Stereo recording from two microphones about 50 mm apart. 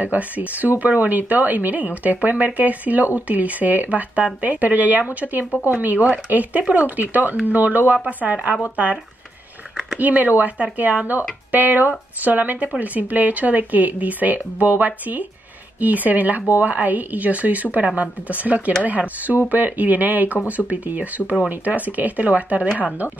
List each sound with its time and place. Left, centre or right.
0.0 s speech: right
9.9 s speech: right